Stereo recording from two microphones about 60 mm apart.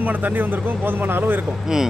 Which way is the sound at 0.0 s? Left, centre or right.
Right.